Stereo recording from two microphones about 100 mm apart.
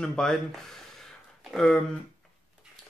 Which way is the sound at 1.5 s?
5° left (ahead or behind).